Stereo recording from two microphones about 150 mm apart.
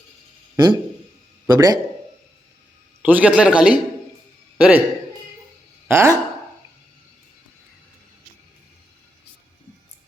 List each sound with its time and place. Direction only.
0.5 s a man's voice: 30° right (ahead or behind)
3.0 s a man's voice: 10° right (ahead or behind)
5.9 s a man's voice: 20° right (ahead or behind)